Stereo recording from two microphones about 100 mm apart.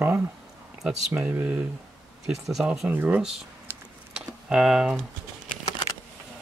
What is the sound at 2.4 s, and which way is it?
Speech, 5° right (ahead or behind).